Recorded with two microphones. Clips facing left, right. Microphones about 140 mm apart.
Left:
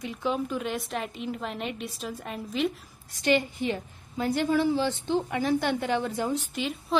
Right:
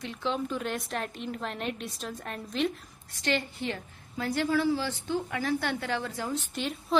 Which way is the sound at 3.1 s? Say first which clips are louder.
Left 6 dB; 15° left (ahead or behind).